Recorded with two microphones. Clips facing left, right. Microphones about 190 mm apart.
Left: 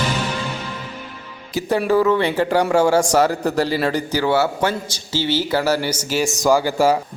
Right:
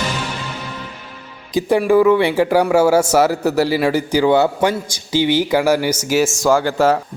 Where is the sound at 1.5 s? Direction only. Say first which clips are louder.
Right 4 dB; 15° right (ahead or behind).